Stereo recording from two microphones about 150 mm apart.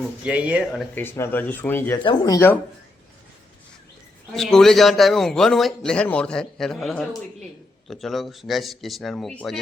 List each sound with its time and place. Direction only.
0.3 s speech: 10° right (ahead or behind)
0.9 s speech: 15° left (ahead or behind)
2.0 s speech: 25° left (ahead or behind)
4.3 s a man's voice: 5° left (ahead or behind)